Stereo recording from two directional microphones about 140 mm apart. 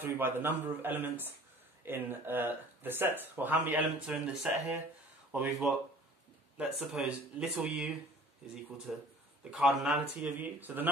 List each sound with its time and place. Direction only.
0.0 s speech: 15° right (ahead or behind)